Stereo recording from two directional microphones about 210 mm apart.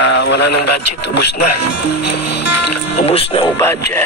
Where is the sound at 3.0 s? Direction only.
25° left (ahead or behind).